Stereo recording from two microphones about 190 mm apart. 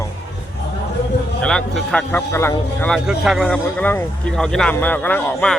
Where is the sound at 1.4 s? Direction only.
5° left (ahead or behind).